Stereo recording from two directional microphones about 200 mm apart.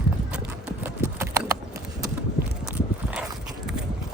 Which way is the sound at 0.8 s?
15° right (ahead or behind).